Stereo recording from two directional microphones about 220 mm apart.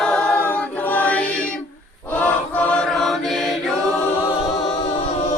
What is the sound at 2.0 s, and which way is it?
Chant, 5° left (ahead or behind).